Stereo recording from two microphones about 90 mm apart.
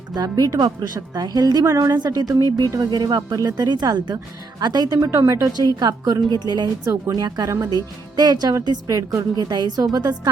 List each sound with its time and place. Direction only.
0.1 s speech: 50° right (ahead or behind)
6.8 s a woman's voice: 35° right (ahead or behind)
7.2 s speech: 50° right (ahead or behind)